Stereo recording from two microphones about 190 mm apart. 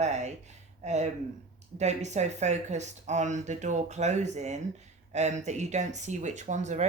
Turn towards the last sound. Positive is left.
turn(degrees=-40)  # may be behind; listen again after turning